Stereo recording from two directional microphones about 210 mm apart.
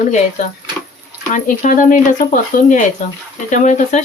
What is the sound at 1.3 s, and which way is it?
Speech, 35° left (ahead or behind).